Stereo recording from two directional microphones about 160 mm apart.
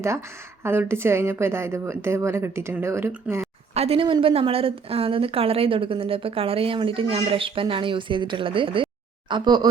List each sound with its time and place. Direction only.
0.0 s speech: 15° right (ahead or behind)
3.8 s a woman's voice: 35° right (ahead or behind)